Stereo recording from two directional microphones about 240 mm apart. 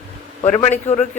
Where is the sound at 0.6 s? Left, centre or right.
Left.